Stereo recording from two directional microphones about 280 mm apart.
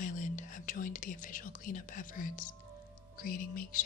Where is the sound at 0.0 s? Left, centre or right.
Left.